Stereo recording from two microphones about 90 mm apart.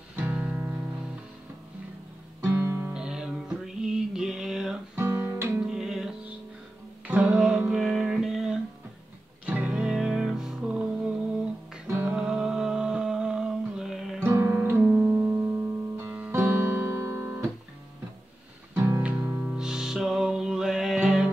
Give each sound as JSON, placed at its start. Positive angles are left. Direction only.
{"t": 0.1, "sound": "music", "side_deg": -20}
{"t": 2.4, "sound": "music", "side_deg": -25}
{"t": 2.9, "sound": "music", "side_deg": -10}
{"t": 4.9, "sound": "guitar", "side_deg": -25}
{"t": 5.6, "sound": "music", "side_deg": -5}
{"t": 9.6, "sound": "music", "side_deg": -10}
{"t": 12.1, "sound": "music", "side_deg": -5}
{"t": 14.2, "sound": "music", "side_deg": -25}
{"t": 14.8, "sound": "music", "side_deg": -10}
{"t": 18.8, "sound": "music", "side_deg": -30}
{"t": 19.0, "sound": "music", "side_deg": -10}